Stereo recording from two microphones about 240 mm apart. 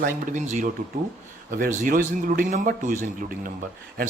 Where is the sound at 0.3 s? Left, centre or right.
Right.